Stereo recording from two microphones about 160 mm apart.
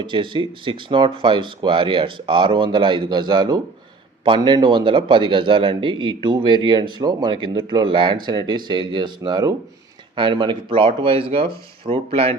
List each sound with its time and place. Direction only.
0.0 s speech: 30° right (ahead or behind)